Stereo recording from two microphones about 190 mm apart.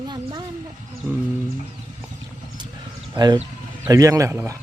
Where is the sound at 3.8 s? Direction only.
20° right (ahead or behind).